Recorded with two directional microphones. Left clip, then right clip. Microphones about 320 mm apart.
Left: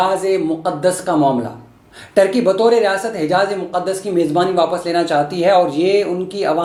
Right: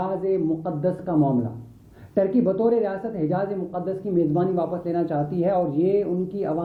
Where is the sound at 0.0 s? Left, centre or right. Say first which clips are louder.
Left 8 dB; centre.